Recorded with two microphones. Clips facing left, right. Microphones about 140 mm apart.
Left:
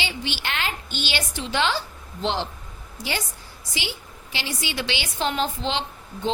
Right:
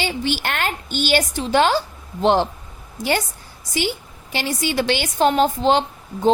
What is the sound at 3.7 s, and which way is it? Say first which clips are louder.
A woman's voice: right 10 dB; 45° right (ahead or behind).